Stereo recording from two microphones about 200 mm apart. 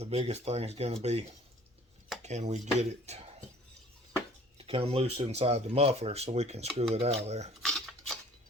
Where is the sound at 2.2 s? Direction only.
35° right (ahead or behind).